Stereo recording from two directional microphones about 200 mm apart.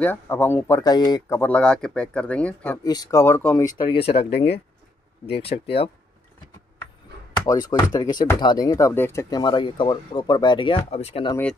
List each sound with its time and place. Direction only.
0.0 s speech: 10° left (ahead or behind)
2.8 s speech: 20° left (ahead or behind)
3.7 s speech: 25° left (ahead or behind)
7.4 s speech: 20° left (ahead or behind)